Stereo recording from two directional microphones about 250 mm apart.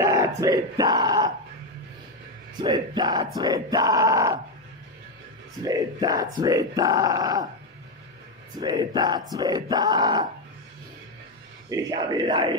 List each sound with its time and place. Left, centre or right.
0.0 s speech: centre
2.6 s speech: centre
5.6 s speech: centre
8.5 s speech: centre
11.7 s speech: centre